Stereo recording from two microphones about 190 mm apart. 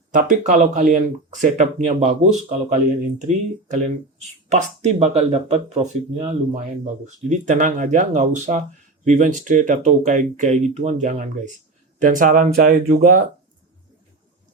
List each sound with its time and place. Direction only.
0.1 s speech: 45° right (ahead or behind)